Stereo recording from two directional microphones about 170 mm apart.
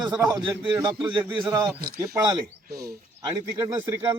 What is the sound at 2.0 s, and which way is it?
Speech, 20° right (ahead or behind).